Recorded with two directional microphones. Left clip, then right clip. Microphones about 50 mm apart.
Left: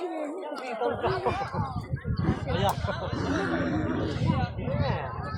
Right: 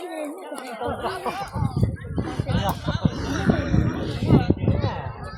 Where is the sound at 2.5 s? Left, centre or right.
Centre.